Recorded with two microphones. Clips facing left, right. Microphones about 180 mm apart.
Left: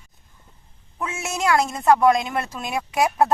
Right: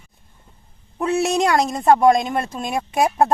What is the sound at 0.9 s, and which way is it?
A woman's voice, 35° right (ahead or behind).